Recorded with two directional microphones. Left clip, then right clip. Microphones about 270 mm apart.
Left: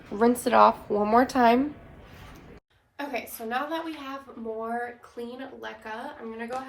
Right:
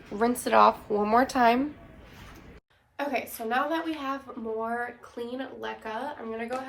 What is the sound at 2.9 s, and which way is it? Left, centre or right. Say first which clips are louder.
Speech: right 3 dB; centre.